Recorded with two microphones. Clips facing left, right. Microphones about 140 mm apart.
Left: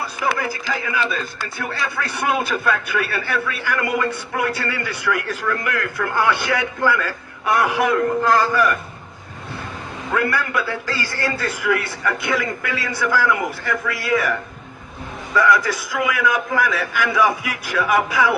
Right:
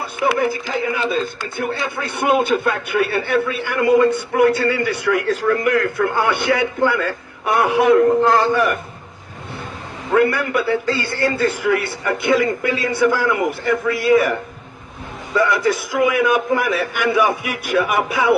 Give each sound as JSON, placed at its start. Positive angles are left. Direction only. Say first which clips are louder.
{"t": 0.3, "sound": "a man's voice", "louder": "right 5 dB", "side_deg": -25}
{"t": 10.2, "sound": "a man's voice", "louder": "right 5 dB", "side_deg": -25}